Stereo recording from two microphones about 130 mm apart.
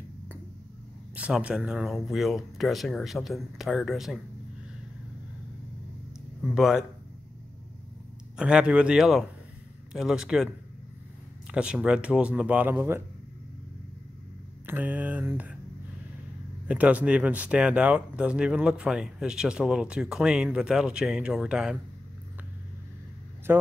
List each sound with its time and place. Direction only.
1.1 s speech: 10° right (ahead or behind)
6.5 s speech: centre (ahead or behind)
8.4 s speech: 5° right (ahead or behind)
11.5 s speech: 10° right (ahead or behind)
14.7 s speech: 15° right (ahead or behind)
16.6 s speech: 10° right (ahead or behind)
23.5 s speech: 15° right (ahead or behind)